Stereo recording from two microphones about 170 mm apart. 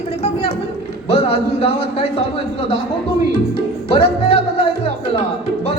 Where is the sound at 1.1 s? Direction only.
35° left (ahead or behind).